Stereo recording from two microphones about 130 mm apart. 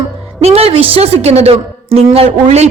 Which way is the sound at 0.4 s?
50° right (ahead or behind).